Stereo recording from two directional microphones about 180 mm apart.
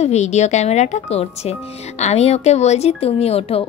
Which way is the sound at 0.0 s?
40° left (ahead or behind).